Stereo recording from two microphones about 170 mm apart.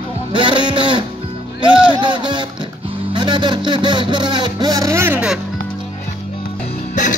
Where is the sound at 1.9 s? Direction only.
25° right (ahead or behind); by 5.3 s 10° right (ahead or behind).